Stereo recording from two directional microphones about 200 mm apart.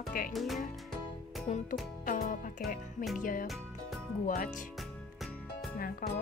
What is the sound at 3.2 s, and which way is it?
Speech, 45° left (ahead or behind).